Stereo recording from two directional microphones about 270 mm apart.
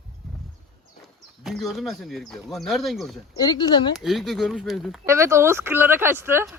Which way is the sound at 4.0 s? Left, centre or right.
Centre.